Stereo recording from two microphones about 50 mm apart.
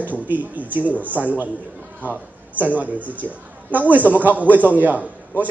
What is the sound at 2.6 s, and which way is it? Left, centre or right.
A woman's voice, right.